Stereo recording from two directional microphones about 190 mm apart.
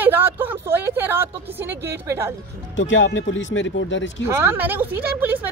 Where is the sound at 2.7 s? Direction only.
80° left.